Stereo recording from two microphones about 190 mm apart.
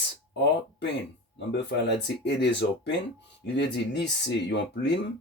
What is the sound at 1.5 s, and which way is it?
Speech, 65° left (ahead or behind).